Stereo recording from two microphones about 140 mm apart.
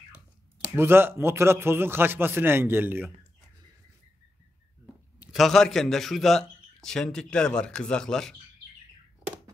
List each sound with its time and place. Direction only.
0.7 s a man's voice: 15° right (ahead or behind)
5.2 s a man's voice: centre (ahead or behind)